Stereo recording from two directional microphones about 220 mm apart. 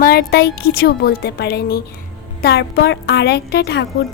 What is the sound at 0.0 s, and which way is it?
A woman's voice, 45° left (ahead or behind).